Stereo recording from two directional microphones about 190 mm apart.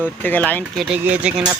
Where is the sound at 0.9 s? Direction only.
5° right (ahead or behind).